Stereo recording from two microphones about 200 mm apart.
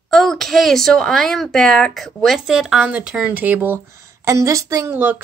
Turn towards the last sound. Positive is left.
turn(degrees=-10)  # may be behind; listen again after turning